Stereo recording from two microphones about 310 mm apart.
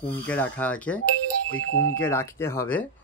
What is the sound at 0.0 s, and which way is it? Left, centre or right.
Speech, centre.